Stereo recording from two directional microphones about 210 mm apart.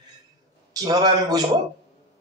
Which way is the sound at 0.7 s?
15° right (ahead or behind).